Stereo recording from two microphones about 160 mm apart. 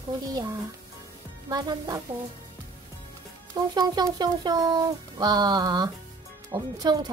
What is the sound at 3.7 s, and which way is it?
Speech, 25° right (ahead or behind).